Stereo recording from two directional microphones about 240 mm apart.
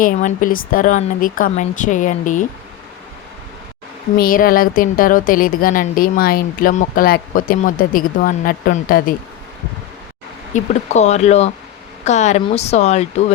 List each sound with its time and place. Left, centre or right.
0.0 s a woman's voice: left
4.2 s a woman's voice: left
10.5 s speech: left